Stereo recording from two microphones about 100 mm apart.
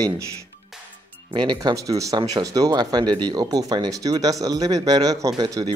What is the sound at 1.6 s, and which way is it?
Speech, 35° right (ahead or behind).